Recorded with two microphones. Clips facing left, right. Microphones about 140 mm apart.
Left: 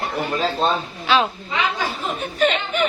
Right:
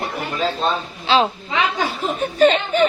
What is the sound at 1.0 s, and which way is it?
Speech, 30° right (ahead or behind).